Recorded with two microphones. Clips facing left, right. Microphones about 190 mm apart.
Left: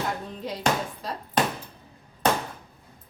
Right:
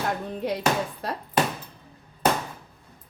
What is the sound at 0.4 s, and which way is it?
Speech, 60° right (ahead or behind).